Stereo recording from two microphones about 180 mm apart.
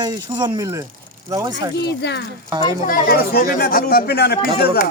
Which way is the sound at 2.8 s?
50° left (ahead or behind).